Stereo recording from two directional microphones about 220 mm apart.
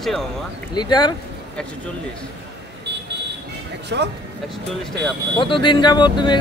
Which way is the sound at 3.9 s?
50° right (ahead or behind).